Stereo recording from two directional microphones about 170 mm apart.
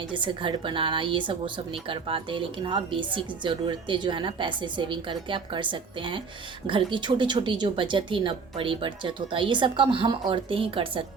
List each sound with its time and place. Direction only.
0.1 s speech: 30° right (ahead or behind)